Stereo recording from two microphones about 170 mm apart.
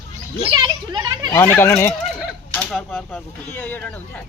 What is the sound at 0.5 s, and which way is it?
Speech, 25° right (ahead or behind).